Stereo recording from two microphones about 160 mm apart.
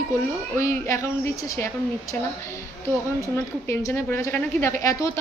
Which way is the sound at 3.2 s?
15° left (ahead or behind).